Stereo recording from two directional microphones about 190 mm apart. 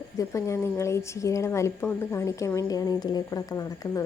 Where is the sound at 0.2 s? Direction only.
15° left (ahead or behind).